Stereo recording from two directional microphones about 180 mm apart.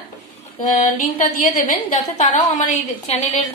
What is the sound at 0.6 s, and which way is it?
A woman's voice, 45° left (ahead or behind).